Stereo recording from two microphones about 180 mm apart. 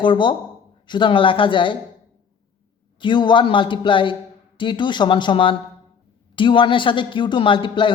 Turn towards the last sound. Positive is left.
turn(degrees=25)  # may be behind; listen again after turning